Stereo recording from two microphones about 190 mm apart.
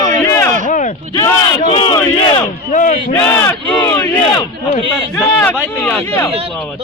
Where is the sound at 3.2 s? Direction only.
10° left (ahead or behind).